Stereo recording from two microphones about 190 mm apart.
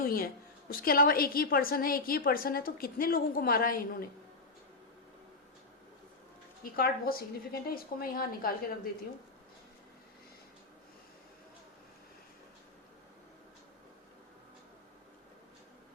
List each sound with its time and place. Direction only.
0.0 s a woman's voice: 50° left (ahead or behind)
6.7 s a woman's voice: 50° left (ahead or behind)